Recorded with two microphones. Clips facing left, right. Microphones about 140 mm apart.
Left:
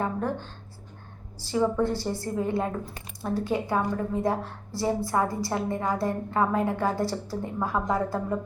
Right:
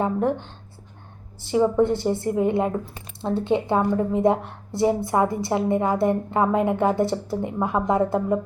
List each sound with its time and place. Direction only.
0.0 s a woman's voice: 20° right (ahead or behind)
1.5 s a woman's voice: 20° right (ahead or behind)